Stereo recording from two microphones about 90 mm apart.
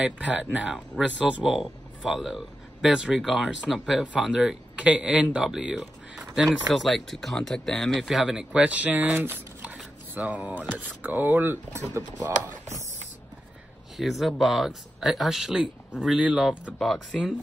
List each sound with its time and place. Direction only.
0.0 s a man's voice: 15° right (ahead or behind)
13.9 s speech: centre (ahead or behind)
16.7 s speech: 5° left (ahead or behind)